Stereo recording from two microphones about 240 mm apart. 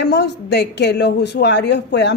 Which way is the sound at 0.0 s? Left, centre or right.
Left.